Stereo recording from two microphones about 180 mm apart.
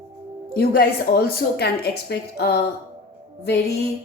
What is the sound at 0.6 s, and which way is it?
A woman's voice, 60° left (ahead or behind).